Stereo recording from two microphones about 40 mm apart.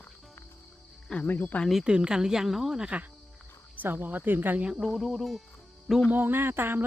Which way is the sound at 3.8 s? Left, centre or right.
Right.